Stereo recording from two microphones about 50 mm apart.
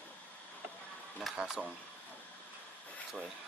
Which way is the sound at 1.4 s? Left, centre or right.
Centre.